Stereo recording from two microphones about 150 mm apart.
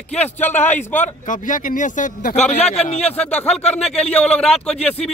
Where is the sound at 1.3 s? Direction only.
60° left (ahead or behind).